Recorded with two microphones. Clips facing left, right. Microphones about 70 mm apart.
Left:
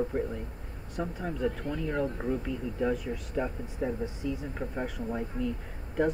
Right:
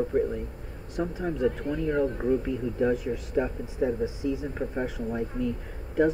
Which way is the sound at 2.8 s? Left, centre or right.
Centre.